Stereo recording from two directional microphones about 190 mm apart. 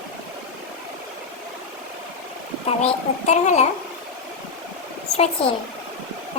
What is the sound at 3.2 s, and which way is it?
Speech, 40° left (ahead or behind).